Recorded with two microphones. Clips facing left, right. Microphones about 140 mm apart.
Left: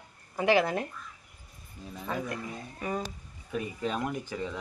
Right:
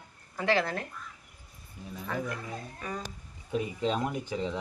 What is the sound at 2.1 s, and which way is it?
Speech, 20° left (ahead or behind).